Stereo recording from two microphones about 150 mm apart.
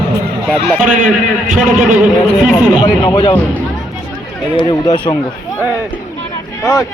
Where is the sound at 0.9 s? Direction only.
60° right (ahead or behind).